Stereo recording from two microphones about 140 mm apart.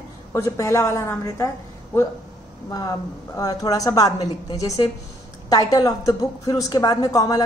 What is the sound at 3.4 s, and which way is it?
A woman's voice, 25° left (ahead or behind).